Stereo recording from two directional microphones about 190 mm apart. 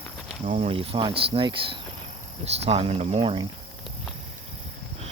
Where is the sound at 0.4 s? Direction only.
35° right (ahead or behind).